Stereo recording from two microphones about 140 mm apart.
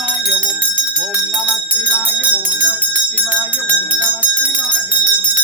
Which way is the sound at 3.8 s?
10° right (ahead or behind).